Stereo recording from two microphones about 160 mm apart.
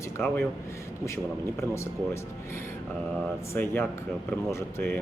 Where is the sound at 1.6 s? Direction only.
15° left (ahead or behind).